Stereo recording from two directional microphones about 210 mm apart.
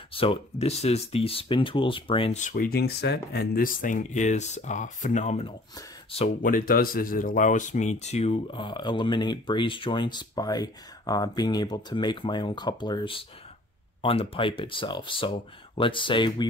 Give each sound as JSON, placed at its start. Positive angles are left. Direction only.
{"t": 0.1, "sound": "speech", "side_deg": 25}